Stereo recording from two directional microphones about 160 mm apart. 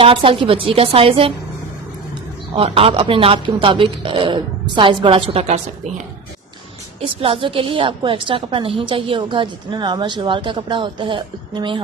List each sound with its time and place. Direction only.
0.0 s a woman's voice: 35° right (ahead or behind)
2.6 s a woman's voice: 40° right (ahead or behind)
7.0 s a woman's voice: 35° right (ahead or behind)